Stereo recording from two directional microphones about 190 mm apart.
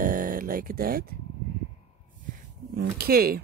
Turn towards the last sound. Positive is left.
turn(degrees=-50)  # may be behind; listen again after turning